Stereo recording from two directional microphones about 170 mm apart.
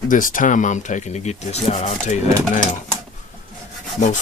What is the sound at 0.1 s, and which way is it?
Speech, 50° left (ahead or behind).